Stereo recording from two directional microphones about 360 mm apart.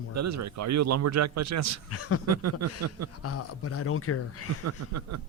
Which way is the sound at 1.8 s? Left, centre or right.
Left.